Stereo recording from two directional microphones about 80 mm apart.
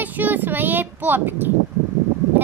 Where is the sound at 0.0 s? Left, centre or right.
Right.